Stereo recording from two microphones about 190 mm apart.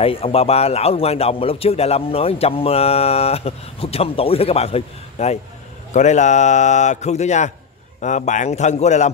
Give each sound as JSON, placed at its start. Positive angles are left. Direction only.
{"t": 0.0, "sound": "a man's voice", "side_deg": 30}